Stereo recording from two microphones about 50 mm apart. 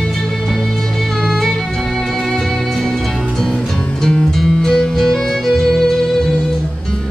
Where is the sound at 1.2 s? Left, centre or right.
Centre.